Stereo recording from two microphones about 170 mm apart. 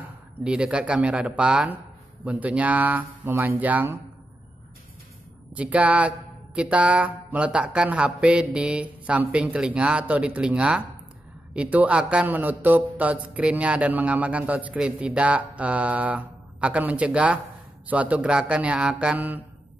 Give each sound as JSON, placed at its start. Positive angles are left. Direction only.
{"t": 0.4, "sound": "a man's voice", "side_deg": -5}
{"t": 5.5, "sound": "a man's voice", "side_deg": -10}